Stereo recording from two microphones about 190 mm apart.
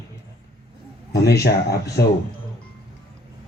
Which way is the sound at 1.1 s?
60° left (ahead or behind).